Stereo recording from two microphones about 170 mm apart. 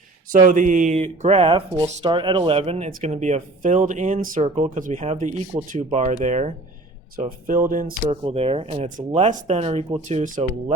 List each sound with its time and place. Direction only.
0.3 s speech: 50° right (ahead or behind)
8.0 s speech: 35° right (ahead or behind)